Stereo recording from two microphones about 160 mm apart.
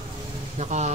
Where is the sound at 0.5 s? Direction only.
45° right (ahead or behind).